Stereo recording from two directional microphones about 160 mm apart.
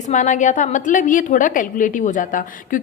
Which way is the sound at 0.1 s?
50° left (ahead or behind).